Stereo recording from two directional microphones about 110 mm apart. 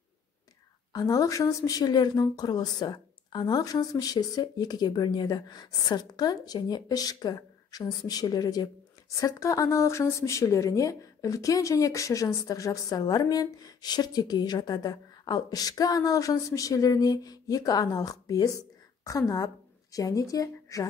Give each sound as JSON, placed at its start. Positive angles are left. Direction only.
{"t": 0.9, "sound": "a woman's voice", "side_deg": 30}